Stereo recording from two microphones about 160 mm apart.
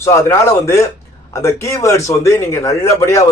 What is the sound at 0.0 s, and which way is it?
Speech, 15° left (ahead or behind).